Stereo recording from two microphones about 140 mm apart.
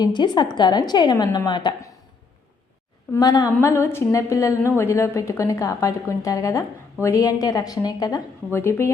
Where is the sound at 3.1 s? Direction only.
25° left (ahead or behind).